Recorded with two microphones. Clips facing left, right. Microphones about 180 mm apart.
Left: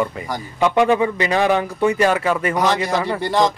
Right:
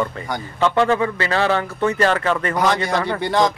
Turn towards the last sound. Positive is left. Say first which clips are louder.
# even
turn(degrees=0)  # may be behind; listen again after turning